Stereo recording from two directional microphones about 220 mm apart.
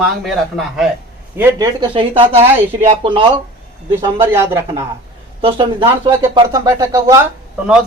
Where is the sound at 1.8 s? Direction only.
25° right (ahead or behind).